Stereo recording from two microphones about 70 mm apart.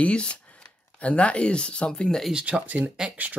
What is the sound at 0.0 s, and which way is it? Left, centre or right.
Speech, centre.